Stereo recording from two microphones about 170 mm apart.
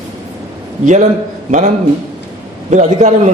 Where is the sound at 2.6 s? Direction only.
45° right (ahead or behind).